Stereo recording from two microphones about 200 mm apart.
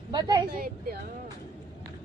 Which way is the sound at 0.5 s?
50° right (ahead or behind).